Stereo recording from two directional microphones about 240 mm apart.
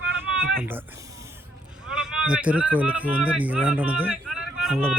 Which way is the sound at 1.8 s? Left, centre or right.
Centre.